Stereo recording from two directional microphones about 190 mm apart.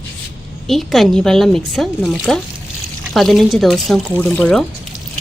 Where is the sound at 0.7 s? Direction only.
Centre (ahead or behind).